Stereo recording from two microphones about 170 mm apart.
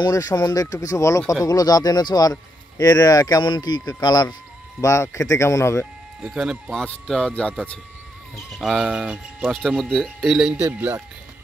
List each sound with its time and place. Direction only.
0.0 s speech: 20° left (ahead or behind)
6.2 s speech: 5° right (ahead or behind)
8.5 s speech: centre (ahead or behind)